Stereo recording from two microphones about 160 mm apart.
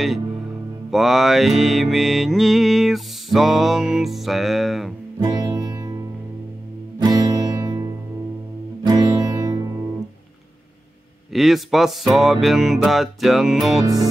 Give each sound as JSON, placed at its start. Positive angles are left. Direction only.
{"t": 0.8, "sound": "music", "side_deg": 0}
{"t": 5.2, "sound": "music", "side_deg": -25}
{"t": 7.0, "sound": "music", "side_deg": -25}
{"t": 8.8, "sound": "music", "side_deg": -25}
{"t": 11.3, "sound": "music", "side_deg": 0}